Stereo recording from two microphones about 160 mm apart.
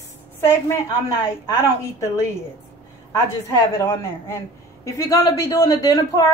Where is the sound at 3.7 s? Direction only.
15° left (ahead or behind).